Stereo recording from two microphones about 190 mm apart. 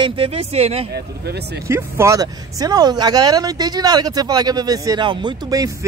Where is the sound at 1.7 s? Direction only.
15° right (ahead or behind).